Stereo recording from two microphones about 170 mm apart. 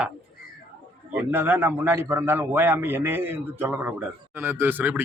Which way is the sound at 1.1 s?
10° right (ahead or behind).